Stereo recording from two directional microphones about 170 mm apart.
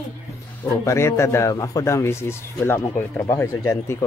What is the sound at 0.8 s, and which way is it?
Speech, 15° left (ahead or behind).